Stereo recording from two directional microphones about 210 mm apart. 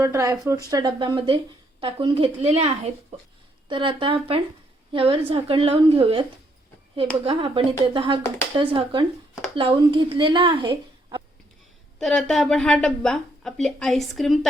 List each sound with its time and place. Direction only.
0.0 s a woman's voice: 15° right (ahead or behind)
11.9 s a woman's voice: centre (ahead or behind)